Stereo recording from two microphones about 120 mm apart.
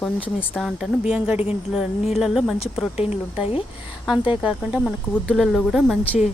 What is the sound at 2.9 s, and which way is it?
Speech, 60° left (ahead or behind).